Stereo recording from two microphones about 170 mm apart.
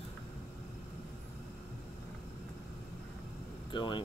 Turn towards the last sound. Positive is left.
turn(degrees=30)  # may be behind; listen again after turning